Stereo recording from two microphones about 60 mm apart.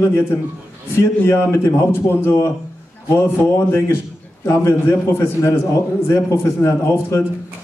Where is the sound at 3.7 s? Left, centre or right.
Left.